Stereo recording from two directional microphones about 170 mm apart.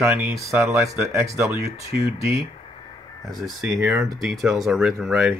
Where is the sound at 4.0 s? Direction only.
Centre (ahead or behind).